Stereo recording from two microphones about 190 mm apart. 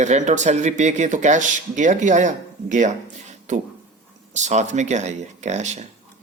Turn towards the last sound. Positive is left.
turn(degrees=-40)  # may be behind; listen again after turning